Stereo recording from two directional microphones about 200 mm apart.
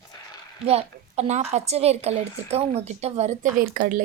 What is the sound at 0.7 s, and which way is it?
A woman's voice, 30° right (ahead or behind).